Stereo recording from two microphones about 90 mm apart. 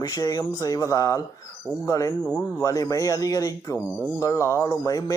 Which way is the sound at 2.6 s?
40° left (ahead or behind).